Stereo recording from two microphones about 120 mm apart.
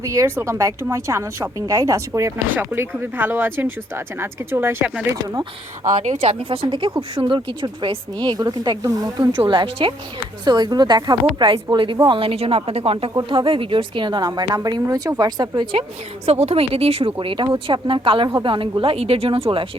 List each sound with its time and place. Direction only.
0.0 s speech: 25° right (ahead or behind)
6.0 s speech: 65° right (ahead or behind); by 9.3 s 35° right (ahead or behind)
9.4 s speech: 45° right (ahead or behind)
10.4 s speech: 35° right (ahead or behind)
16.2 s speech: 60° right (ahead or behind)
17.2 s speech: 45° right (ahead or behind)